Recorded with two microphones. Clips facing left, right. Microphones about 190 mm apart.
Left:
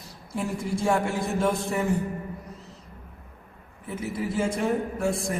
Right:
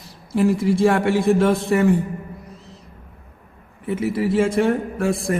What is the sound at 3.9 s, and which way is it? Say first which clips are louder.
A man's voice: right 9 dB; 85° right.